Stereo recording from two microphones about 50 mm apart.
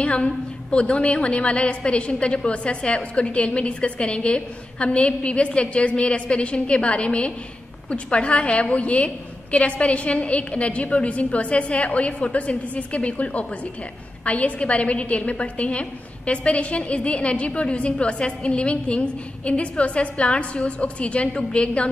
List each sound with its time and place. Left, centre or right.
0.0 s a woman's voice: left